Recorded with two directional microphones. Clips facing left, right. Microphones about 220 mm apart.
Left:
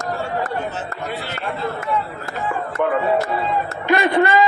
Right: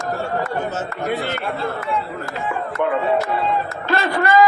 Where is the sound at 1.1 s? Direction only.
50° right (ahead or behind).